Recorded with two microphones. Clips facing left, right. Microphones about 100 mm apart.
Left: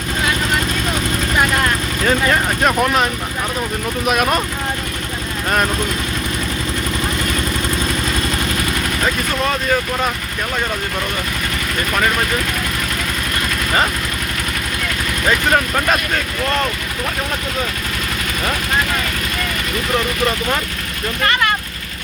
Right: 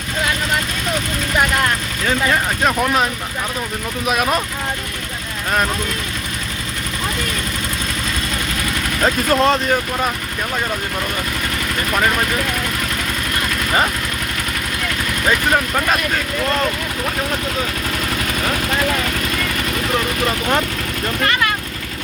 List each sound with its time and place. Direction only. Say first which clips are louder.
2.0 s speech: left 1 dB; centre (ahead or behind)
9.0 s speech: right 6 dB; 30° right (ahead or behind)
15.3 s speech: left 1 dB; centre (ahead or behind)